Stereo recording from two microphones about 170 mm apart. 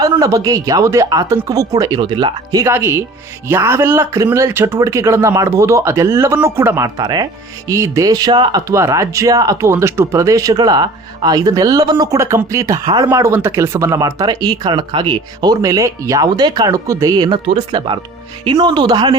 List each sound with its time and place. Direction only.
0.0 s a man's voice: 20° right (ahead or behind)